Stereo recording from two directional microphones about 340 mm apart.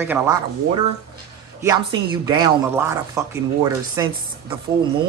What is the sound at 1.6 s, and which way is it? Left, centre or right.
Speech, centre.